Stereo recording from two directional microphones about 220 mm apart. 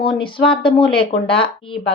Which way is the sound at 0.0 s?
25° left (ahead or behind).